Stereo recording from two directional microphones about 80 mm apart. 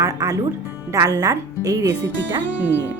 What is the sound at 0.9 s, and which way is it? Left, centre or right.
A woman's voice, right.